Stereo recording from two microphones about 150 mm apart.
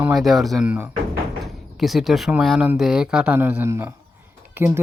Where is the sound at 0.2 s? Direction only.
Centre (ahead or behind).